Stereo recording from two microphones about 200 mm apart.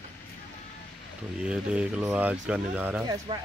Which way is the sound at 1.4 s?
5° right (ahead or behind).